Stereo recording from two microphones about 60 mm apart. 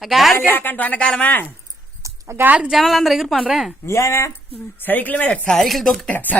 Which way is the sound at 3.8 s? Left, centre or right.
Left.